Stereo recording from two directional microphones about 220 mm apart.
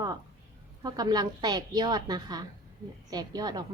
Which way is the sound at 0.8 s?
15° right (ahead or behind).